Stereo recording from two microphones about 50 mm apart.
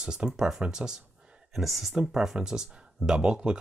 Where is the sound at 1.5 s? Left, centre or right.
Centre.